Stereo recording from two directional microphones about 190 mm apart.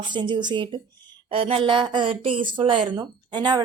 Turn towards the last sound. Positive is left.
turn(degrees=-20)  # may be behind; listen again after turning